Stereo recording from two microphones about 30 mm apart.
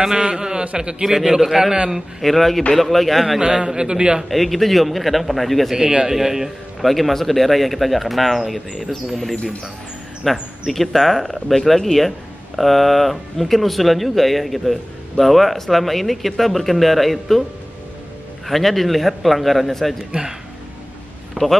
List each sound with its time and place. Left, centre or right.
0.0 s a man's voice: right
1.0 s a man's voice: centre
2.2 s speech: centre
3.3 s a man's voice: right
4.3 s speech: centre
5.8 s a man's voice: right
6.0 s a man's voice: centre
6.8 s speech: centre
10.3 s speech: centre
18.5 s speech: centre
21.4 s speech: centre